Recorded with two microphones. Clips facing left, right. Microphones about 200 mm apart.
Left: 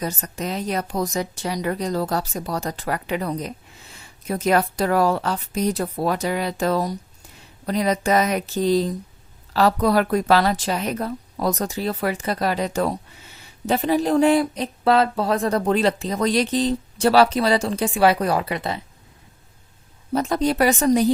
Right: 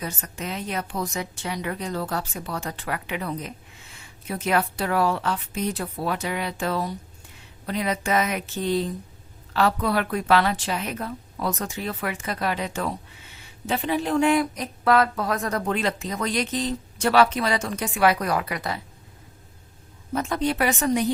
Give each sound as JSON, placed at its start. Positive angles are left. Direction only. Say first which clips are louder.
{"t": 0.0, "sound": "a woman's voice", "louder": "left 5 dB", "side_deg": 40}
{"t": 20.1, "sound": "a woman's voice", "louder": "left 4 dB", "side_deg": 35}